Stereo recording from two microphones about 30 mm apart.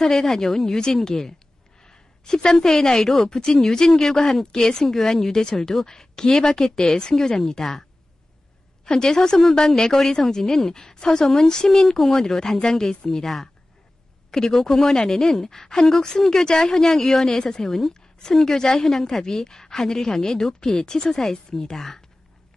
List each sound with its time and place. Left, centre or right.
0.0 s a woman's voice: centre
4.8 s speech: centre
5.9 s a woman's voice: left
8.8 s a woman's voice: left
14.3 s a woman's voice: centre
16.9 s a woman's voice: centre